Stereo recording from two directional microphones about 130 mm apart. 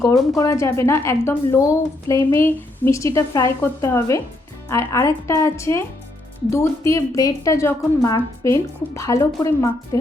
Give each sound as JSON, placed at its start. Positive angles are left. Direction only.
{"t": 0.0, "sound": "speech", "side_deg": 25}